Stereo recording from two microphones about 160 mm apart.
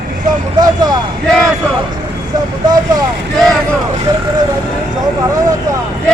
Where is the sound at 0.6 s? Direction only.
25° right (ahead or behind).